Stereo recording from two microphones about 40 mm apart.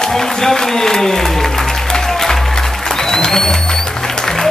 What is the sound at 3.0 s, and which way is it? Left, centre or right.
Music, centre.